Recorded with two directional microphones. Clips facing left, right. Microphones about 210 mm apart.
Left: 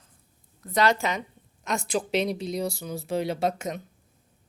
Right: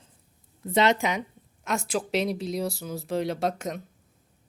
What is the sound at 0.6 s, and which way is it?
Speech, 25° right (ahead or behind).